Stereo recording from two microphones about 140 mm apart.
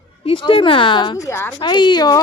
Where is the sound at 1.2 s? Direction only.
20° left (ahead or behind).